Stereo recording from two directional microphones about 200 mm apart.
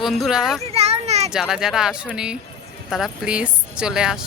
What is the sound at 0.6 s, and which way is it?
Children playing, 30° right (ahead or behind).